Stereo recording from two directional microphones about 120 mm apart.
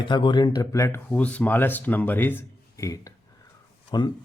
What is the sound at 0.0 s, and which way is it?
Speech, 40° left (ahead or behind).